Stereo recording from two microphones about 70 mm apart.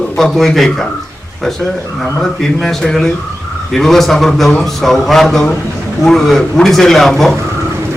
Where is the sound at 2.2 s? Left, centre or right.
Centre.